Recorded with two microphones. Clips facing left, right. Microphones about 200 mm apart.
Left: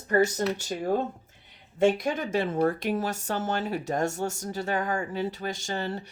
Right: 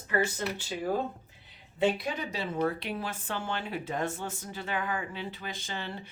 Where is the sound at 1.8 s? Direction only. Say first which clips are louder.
Left 5 dB; 45° left (ahead or behind).